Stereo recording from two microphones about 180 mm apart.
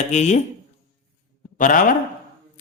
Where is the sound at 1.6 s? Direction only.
45° left (ahead or behind).